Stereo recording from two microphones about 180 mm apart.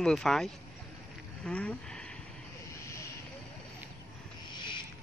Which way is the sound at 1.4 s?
5° left (ahead or behind).